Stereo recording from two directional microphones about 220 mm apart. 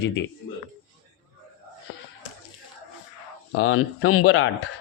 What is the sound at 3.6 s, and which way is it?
Speech, 65° left (ahead or behind).